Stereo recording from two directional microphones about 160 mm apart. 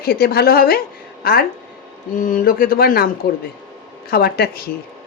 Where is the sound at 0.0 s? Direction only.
70° left (ahead or behind).